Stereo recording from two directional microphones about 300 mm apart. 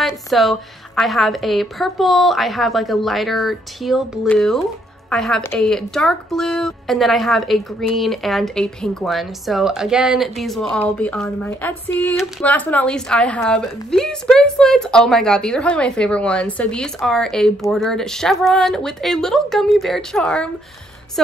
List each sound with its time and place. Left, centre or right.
0.0 s speech: centre